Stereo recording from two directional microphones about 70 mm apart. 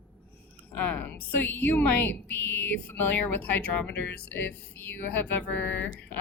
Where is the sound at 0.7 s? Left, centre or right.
Left.